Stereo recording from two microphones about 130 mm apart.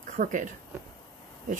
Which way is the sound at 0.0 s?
75° right (ahead or behind).